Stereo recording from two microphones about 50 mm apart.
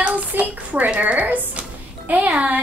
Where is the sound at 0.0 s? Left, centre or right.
Right.